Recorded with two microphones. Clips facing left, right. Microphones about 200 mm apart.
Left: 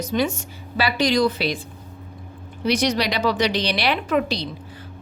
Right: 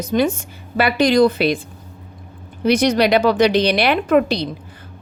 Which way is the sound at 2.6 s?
55° right (ahead or behind).